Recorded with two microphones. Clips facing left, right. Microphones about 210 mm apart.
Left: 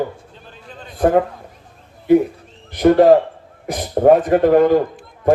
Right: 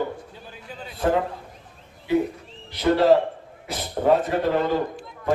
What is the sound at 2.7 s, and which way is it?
Speech, 50° left (ahead or behind).